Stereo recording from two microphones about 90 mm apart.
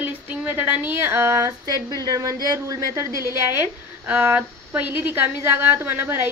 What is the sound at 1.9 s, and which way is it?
Speech, 45° right (ahead or behind).